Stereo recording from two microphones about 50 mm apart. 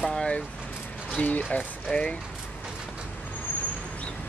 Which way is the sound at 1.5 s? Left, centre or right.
Left.